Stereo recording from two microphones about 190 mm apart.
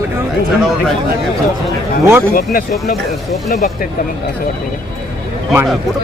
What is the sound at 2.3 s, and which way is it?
Speech, 50° left (ahead or behind).